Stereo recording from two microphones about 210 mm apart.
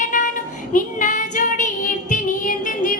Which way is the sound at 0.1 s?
35° left (ahead or behind).